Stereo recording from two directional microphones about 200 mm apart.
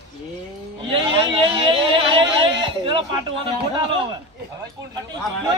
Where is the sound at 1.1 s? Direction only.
25° right (ahead or behind).